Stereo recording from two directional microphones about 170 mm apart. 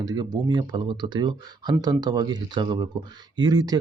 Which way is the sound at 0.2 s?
25° right (ahead or behind).